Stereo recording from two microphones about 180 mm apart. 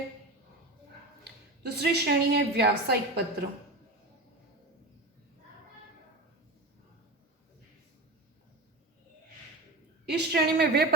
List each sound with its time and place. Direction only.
1.2 s a woman's voice: 65° right (ahead or behind)
10.1 s a woman's voice: 65° right (ahead or behind)